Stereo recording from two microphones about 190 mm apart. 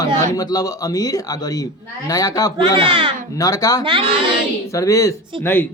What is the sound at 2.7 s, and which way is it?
Speech, 25° right (ahead or behind).